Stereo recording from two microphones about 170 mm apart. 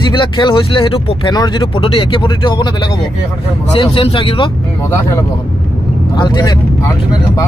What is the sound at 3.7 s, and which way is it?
Speech, 30° left (ahead or behind).